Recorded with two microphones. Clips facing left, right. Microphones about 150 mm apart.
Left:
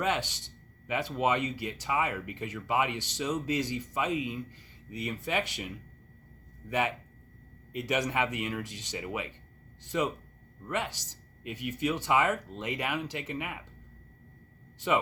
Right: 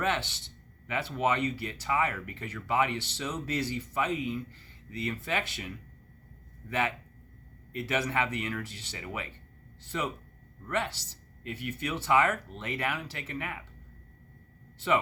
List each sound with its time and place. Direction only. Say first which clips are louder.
0.0 s speech: even; 15° left (ahead or behind)